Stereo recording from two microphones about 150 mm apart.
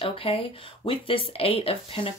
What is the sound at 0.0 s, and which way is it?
Speech, 40° left (ahead or behind).